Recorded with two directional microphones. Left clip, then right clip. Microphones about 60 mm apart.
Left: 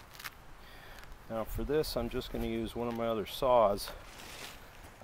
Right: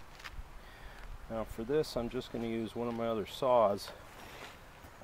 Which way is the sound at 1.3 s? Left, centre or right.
Left.